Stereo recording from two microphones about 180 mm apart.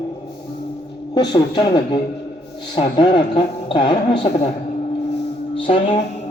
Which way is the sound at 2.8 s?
25° left (ahead or behind).